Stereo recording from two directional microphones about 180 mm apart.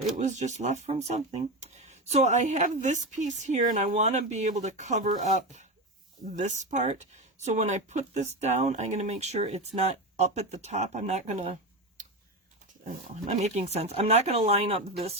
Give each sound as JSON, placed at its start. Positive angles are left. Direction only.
{"t": 0.2, "sound": "speech", "side_deg": -40}
{"t": 12.8, "sound": "speech", "side_deg": -45}